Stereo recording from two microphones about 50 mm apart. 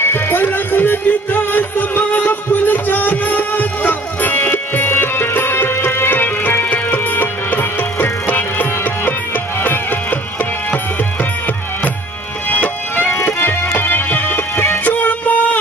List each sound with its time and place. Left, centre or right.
0.0 s music: left
12.4 s music: left
13.1 s music: left
13.7 s music: left